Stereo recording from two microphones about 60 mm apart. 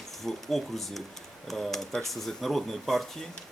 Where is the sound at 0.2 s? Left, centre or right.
Centre.